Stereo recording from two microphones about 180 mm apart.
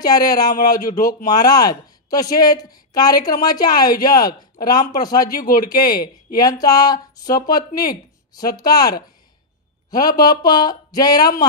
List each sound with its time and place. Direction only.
0.0 s speech: 20° left (ahead or behind)